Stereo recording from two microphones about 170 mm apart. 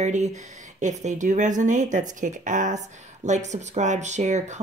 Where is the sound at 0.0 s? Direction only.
45° right (ahead or behind).